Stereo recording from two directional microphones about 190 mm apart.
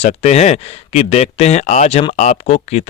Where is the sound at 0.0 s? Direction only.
35° left (ahead or behind).